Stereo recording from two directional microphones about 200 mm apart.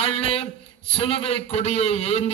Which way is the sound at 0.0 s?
30° left (ahead or behind).